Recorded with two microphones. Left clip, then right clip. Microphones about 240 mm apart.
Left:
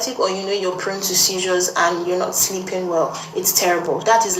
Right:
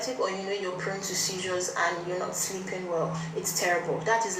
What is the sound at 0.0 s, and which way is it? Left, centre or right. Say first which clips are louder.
Speech: left 9 dB; left.